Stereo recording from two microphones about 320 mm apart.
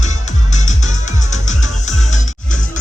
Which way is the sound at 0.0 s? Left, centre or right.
Left.